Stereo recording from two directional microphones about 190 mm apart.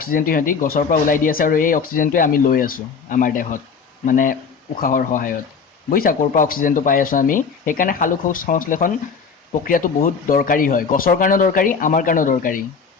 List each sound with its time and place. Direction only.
0.0 s speech: 50° left (ahead or behind)